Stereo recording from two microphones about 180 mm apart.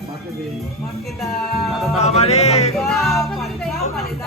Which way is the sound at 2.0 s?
35° left (ahead or behind).